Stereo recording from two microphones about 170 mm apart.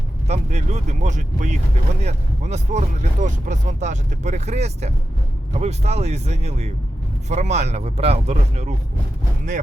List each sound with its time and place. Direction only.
0.3 s speech: 45° right (ahead or behind)